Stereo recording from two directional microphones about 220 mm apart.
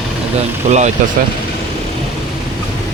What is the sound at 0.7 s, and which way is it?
Speech, 30° right (ahead or behind).